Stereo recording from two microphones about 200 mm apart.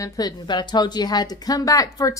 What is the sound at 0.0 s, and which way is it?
A woman's voice, 20° left (ahead or behind).